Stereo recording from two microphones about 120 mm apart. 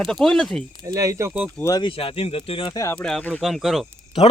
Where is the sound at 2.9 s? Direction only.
5° left (ahead or behind).